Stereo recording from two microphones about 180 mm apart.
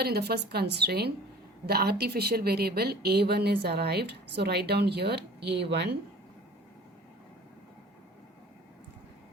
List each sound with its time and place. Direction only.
0.0 s a woman's voice: 60° right (ahead or behind)